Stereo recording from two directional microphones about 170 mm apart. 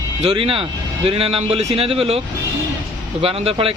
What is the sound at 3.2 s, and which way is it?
Speech, 35° right (ahead or behind).